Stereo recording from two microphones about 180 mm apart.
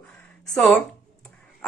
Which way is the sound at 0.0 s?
5° left (ahead or behind).